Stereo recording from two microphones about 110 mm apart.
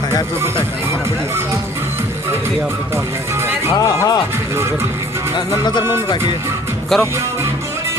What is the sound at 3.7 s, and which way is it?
Speech, 30° left (ahead or behind).